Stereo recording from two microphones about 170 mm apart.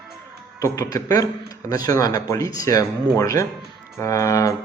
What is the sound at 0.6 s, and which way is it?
Speech, 20° left (ahead or behind).